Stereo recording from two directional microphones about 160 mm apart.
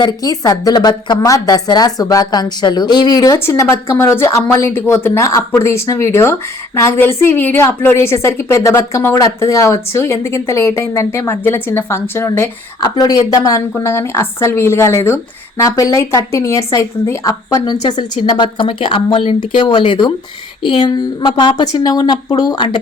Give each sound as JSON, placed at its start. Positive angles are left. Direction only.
{"t": 0.0, "sound": "a woman's voice", "side_deg": 25}